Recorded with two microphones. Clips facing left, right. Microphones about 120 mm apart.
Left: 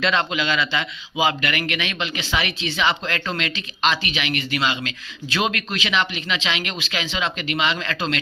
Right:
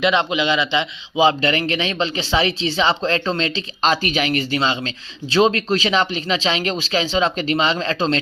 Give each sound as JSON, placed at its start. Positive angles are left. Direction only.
{"t": 0.0, "sound": "a man's voice", "side_deg": -20}